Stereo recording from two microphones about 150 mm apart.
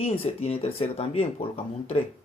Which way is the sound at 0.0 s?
40° left (ahead or behind).